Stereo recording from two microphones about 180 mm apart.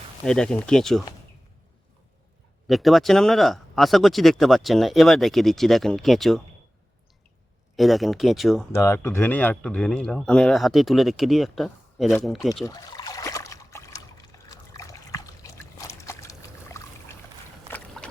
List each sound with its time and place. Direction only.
0.3 s speech: 5° left (ahead or behind)
2.6 s speech: centre (ahead or behind)
7.8 s speech: centre (ahead or behind)
8.7 s speech: 15° left (ahead or behind)
12.6 s trickle: 20° left (ahead or behind)
17.7 s boat: 5° left (ahead or behind)